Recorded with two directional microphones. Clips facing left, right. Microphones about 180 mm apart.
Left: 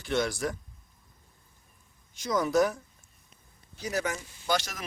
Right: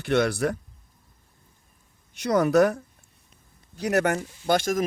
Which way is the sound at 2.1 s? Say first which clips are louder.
Right 6 dB; 65° right (ahead or behind).